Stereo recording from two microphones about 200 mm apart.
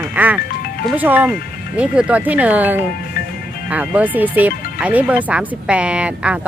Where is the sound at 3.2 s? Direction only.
45° left (ahead or behind).